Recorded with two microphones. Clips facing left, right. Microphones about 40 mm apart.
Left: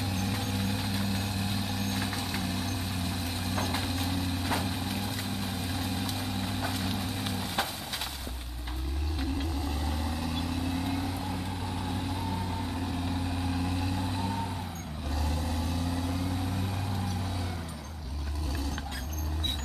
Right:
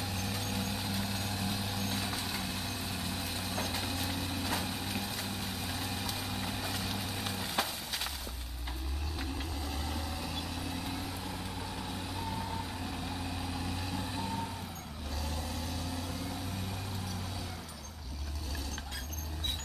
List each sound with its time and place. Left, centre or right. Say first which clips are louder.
0.3 s vehicle: left 4 dB; left
3.3 s vehicle: left 5 dB; centre
5.7 s vehicle: left 4 dB; centre